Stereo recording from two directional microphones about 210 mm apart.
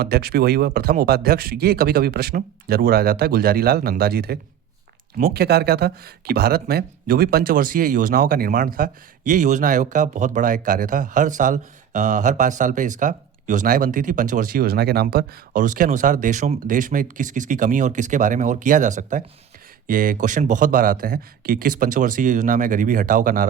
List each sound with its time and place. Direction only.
0.0 s speech: 50° right (ahead or behind)